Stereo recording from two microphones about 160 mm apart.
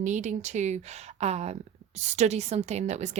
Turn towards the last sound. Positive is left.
turn(degrees=-45)  # may be behind; listen again after turning